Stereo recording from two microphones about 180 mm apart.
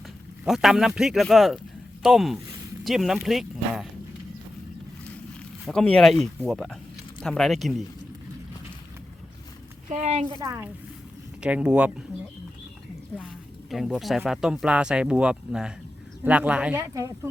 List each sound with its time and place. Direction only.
0.4 s speech: centre (ahead or behind)
5.6 s speech: 5° left (ahead or behind)
9.9 s a woman's voice: 35° right (ahead or behind)
11.4 s speech: 5° right (ahead or behind)
13.7 s speech: centre (ahead or behind)